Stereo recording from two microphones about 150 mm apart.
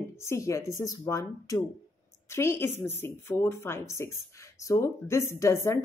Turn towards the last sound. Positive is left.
turn(degrees=20)  # may be behind; listen again after turning